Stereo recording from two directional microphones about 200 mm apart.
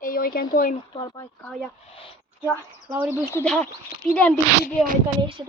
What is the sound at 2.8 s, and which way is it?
Speech, 10° right (ahead or behind).